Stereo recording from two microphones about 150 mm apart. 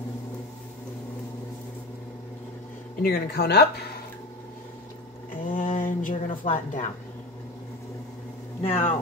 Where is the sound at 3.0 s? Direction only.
90° left.